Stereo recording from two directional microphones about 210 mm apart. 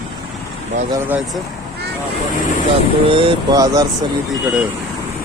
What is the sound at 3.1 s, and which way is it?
Speech, 25° right (ahead or behind).